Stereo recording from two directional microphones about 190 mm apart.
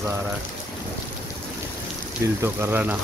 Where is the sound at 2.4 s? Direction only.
10° right (ahead or behind).